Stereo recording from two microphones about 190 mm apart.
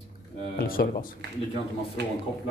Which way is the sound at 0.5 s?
50° left (ahead or behind).